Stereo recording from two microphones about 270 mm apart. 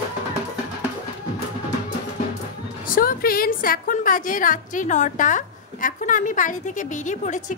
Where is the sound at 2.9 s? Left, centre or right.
Left.